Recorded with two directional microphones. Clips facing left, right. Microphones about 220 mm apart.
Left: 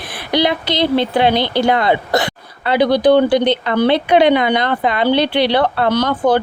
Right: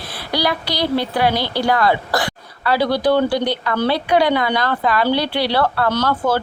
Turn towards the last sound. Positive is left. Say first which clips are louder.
# left 4 dB
turn(degrees=20)  # may be behind; listen again after turning